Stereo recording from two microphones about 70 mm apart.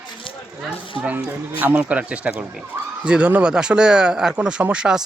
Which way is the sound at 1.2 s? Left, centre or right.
Centre.